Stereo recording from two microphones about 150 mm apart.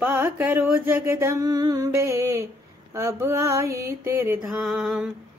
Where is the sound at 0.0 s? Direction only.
10° right (ahead or behind).